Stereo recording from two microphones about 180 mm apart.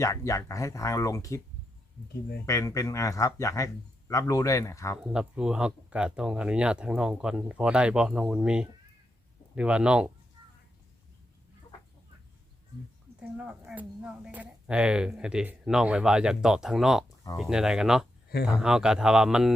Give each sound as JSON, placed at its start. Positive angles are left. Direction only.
{"t": 0.0, "sound": "speech", "side_deg": 15}
{"t": 2.5, "sound": "speech", "side_deg": 15}
{"t": 4.9, "sound": "speech", "side_deg": -5}
{"t": 13.1, "sound": "speech", "side_deg": -5}